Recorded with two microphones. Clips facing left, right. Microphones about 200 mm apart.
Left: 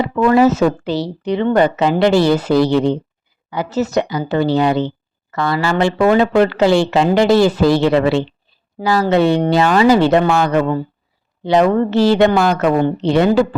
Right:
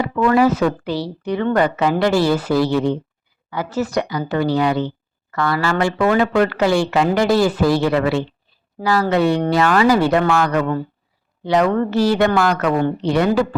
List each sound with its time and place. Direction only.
0.0 s speech: 25° left (ahead or behind)